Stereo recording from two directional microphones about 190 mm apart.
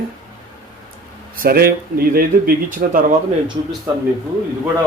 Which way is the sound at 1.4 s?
50° right (ahead or behind).